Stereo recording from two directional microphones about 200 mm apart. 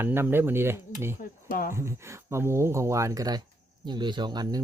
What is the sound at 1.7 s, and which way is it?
Speech, 15° right (ahead or behind).